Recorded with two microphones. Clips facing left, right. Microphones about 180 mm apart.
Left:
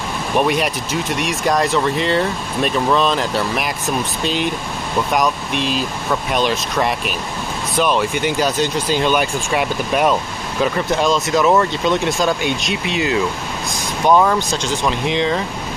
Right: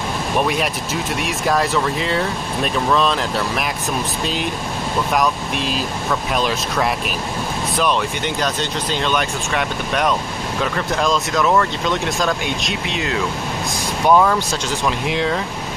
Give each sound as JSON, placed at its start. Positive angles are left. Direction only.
{"t": 0.4, "sound": "speech", "side_deg": 0}
{"t": 11.4, "sound": "speech", "side_deg": 20}
{"t": 12.2, "sound": "speech", "side_deg": 5}